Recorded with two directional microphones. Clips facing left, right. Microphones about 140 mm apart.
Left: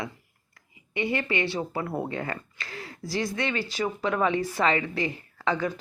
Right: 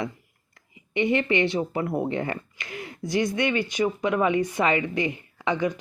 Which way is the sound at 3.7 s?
15° right (ahead or behind).